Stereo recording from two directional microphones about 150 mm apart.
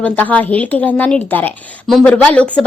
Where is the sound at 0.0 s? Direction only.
10° left (ahead or behind).